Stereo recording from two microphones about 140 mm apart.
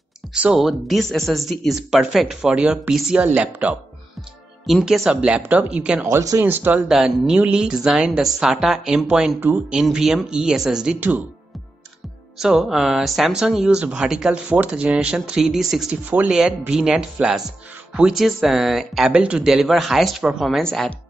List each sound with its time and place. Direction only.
0.3 s speech: 5° right (ahead or behind)
4.6 s speech: centre (ahead or behind)
6.0 s speech: 20° right (ahead or behind)
6.9 s speech: 5° right (ahead or behind)
12.4 s speech: 5° right (ahead or behind)